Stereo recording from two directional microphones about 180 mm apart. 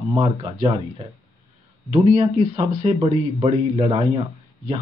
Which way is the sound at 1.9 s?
30° right (ahead or behind).